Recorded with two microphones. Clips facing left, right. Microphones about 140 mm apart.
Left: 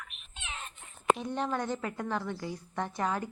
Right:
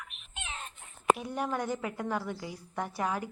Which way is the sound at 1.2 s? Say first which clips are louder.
Left 1 dB; 10° right (ahead or behind).